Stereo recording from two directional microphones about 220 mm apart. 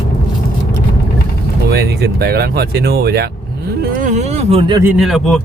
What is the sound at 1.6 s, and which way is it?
Speech, 45° right (ahead or behind).